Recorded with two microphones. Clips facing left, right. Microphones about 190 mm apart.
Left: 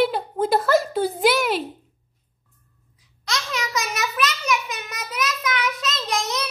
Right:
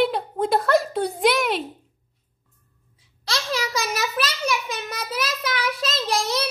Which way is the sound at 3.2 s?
30° right (ahead or behind).